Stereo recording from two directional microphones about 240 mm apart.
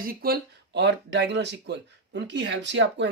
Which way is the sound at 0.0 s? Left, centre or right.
Right.